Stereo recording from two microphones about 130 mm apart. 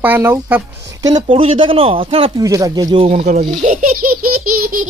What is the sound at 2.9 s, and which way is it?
Speech, 45° right (ahead or behind).